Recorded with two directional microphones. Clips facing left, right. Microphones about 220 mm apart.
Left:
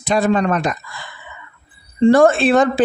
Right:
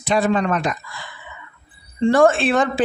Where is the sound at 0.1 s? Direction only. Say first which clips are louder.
Left 2 dB; 40° left (ahead or behind).